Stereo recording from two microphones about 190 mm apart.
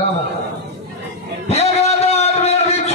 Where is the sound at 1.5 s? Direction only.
35° left (ahead or behind).